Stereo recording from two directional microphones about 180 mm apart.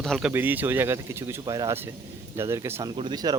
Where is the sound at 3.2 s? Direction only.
25° right (ahead or behind).